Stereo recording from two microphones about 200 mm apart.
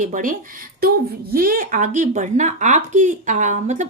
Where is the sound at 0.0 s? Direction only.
40° right (ahead or behind).